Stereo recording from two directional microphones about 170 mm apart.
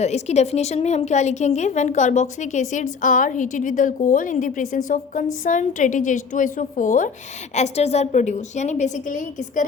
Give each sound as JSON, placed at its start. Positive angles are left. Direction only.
{"t": 0.0, "sound": "a woman's voice", "side_deg": 40}